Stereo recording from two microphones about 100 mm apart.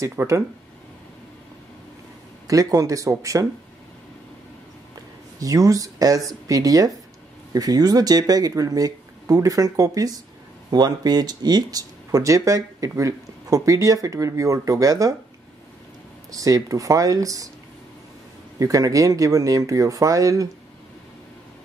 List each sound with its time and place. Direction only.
0.0 s speech: 25° right (ahead or behind)
2.4 s speech: 35° right (ahead or behind)
5.4 s speech: 35° right (ahead or behind)
16.3 s speech: 35° right (ahead or behind)
18.6 s speech: 35° right (ahead or behind)